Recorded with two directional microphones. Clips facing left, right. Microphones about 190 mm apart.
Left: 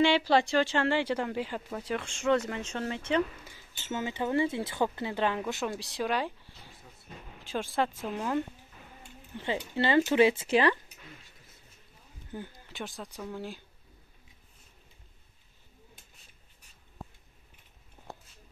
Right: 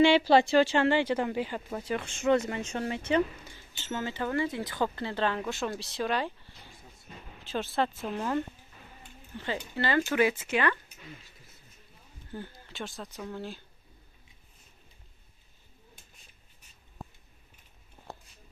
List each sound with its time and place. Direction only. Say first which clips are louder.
0.3 s speech: right 4 dB; 20° right (ahead or behind)
0.7 s speech: right 3 dB; 5° right (ahead or behind)
3.4 s speech: even; 10° left (ahead or behind)
9.4 s speech: left 2 dB; 20° left (ahead or behind)
12.3 s speech: even; 15° left (ahead or behind)